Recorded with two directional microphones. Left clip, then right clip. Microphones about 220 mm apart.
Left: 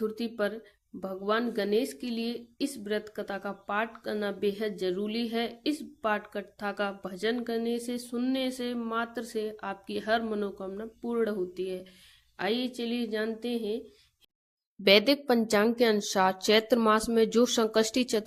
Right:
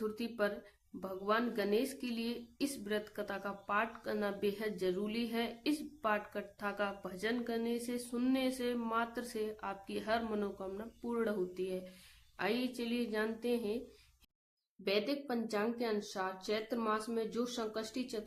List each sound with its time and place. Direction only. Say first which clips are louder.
0.0 s a woman's voice: left 6 dB; 20° left (ahead or behind)
14.8 s a woman's voice: left 14 dB; 40° left (ahead or behind)